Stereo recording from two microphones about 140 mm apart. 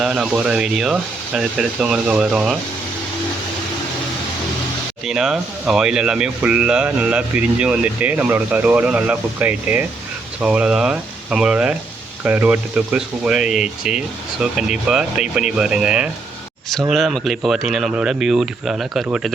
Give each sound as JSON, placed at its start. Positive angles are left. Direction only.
{"t": 0.0, "sound": "speech", "side_deg": -5}
{"t": 5.0, "sound": "speech", "side_deg": -5}